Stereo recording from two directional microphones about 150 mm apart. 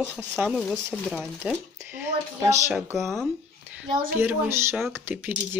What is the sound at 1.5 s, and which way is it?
Speech, 15° right (ahead or behind).